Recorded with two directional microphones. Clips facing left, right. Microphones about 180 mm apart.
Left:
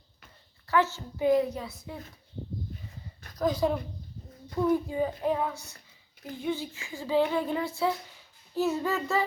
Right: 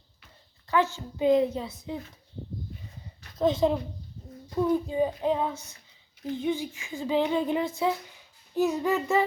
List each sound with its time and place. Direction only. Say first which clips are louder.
0.7 s speech: right 1 dB; 15° right (ahead or behind)
3.3 s speech: right 3 dB; 25° right (ahead or behind)